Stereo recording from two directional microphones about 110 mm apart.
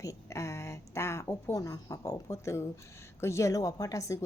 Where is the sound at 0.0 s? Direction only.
30° left (ahead or behind).